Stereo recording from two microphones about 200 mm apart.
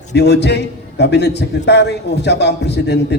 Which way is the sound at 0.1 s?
55° left (ahead or behind).